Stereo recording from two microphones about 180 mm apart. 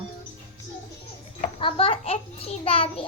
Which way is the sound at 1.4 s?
30° left (ahead or behind).